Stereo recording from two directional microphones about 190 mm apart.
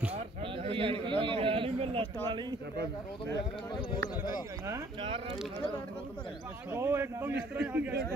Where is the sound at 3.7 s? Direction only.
25° left (ahead or behind).